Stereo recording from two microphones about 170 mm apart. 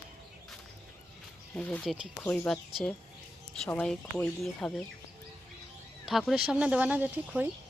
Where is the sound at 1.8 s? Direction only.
5° right (ahead or behind).